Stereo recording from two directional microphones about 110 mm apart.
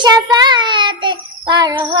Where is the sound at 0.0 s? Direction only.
40° right (ahead or behind).